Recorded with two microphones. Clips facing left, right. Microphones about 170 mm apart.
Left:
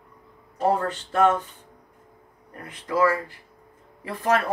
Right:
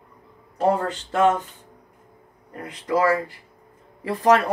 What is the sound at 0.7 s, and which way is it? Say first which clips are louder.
Speech: right 2 dB; 90° right.